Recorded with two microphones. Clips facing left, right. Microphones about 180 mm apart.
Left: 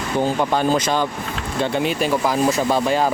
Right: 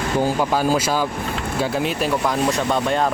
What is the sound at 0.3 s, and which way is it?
Speech, 5° right (ahead or behind).